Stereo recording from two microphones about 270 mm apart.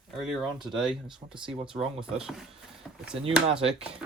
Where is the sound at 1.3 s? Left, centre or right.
Centre.